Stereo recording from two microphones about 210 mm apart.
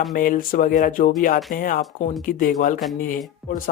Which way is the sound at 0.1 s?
40° left (ahead or behind).